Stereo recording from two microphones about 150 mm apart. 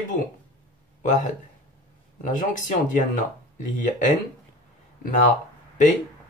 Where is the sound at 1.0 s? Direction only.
55° left (ahead or behind).